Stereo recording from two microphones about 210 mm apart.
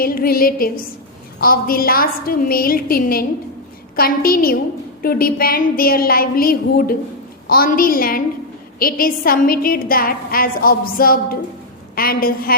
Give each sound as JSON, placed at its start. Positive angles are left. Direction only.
{"t": 0.0, "sound": "a woman's voice", "side_deg": 45}